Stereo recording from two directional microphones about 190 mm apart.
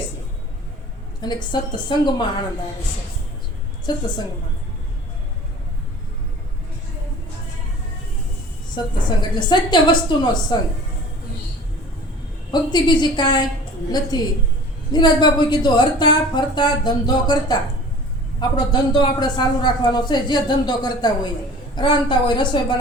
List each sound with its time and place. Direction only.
1.2 s a man's voice: 25° left (ahead or behind)
3.9 s a man's voice: 20° left (ahead or behind)
8.7 s a man's voice: 25° left (ahead or behind)
12.5 s a man's voice: 25° left (ahead or behind)